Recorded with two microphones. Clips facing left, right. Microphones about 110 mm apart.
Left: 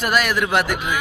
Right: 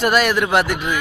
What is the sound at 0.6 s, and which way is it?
Speech, 10° left (ahead or behind).